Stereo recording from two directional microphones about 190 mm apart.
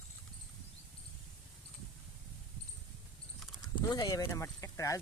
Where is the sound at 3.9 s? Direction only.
20° left (ahead or behind).